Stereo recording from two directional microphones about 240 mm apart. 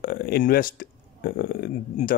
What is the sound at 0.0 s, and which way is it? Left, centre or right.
Speech, left.